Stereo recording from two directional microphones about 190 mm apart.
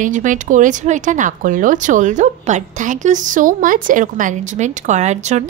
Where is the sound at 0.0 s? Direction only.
40° right (ahead or behind).